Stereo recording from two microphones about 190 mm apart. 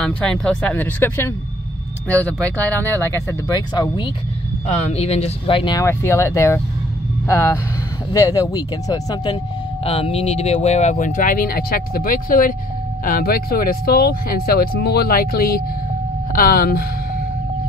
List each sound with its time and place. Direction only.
0.0 s speech: 5° left (ahead or behind); by 4.1 s 20° left (ahead or behind)
4.6 s speech: 35° left (ahead or behind); by 16.8 s 55° left (ahead or behind)